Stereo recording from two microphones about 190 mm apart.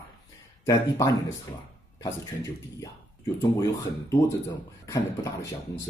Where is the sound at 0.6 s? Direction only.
15° left (ahead or behind).